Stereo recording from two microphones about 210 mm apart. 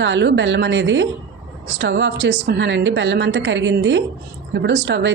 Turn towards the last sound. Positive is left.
turn(degrees=-55)  # may be behind; listen again after turning